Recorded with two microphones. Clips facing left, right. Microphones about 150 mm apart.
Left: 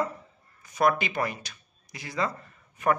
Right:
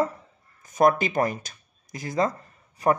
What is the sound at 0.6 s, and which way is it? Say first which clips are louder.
Speech: right 4 dB; 45° right (ahead or behind).